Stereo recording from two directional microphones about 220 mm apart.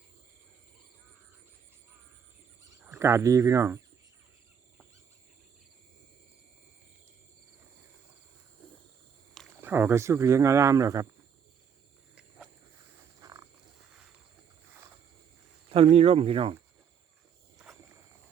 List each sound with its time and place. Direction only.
2.8 s speech: 10° right (ahead or behind)
9.6 s speech: 10° right (ahead or behind)
13.0 s frog: 15° right (ahead or behind)
13.9 s wild animals: 5° right (ahead or behind)
15.7 s speech: 25° right (ahead or behind)